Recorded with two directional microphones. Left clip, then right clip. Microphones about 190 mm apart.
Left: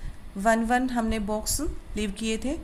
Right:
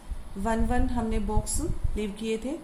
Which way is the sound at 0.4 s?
45° left (ahead or behind).